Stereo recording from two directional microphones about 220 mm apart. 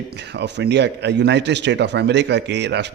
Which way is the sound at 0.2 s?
50° right (ahead or behind).